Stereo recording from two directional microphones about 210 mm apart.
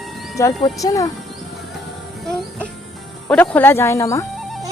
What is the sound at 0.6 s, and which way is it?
Speech, 15° left (ahead or behind).